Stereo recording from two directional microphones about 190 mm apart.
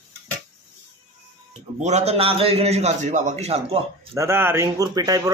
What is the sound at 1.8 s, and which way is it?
A man's voice, 35° right (ahead or behind).